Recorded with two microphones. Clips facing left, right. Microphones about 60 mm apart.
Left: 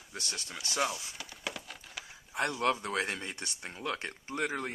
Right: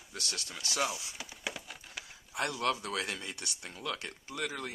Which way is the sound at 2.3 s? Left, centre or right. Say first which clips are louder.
Left 2 dB; left.